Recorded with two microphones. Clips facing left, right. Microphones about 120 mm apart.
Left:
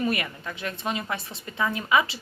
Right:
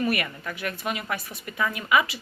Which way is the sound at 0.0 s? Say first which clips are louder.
Right 1 dB; 25° left (ahead or behind).